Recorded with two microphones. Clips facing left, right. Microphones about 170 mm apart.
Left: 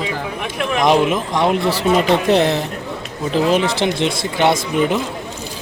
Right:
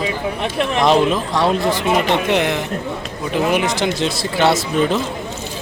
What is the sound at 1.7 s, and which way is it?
Speech, 35° left (ahead or behind).